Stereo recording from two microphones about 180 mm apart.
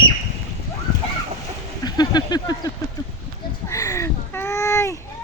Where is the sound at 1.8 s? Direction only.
20° left (ahead or behind).